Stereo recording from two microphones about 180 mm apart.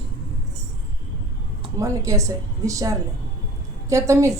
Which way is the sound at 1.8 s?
15° right (ahead or behind).